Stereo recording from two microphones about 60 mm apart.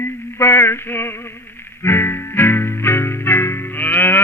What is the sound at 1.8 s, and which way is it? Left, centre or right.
Music, left.